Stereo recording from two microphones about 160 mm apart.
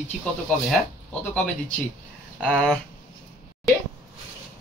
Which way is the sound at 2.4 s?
5° left (ahead or behind).